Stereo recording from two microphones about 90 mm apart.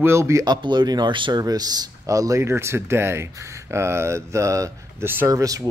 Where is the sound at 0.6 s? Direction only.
55° right (ahead or behind).